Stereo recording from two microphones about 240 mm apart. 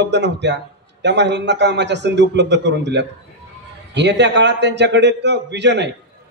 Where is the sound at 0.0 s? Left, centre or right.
Right.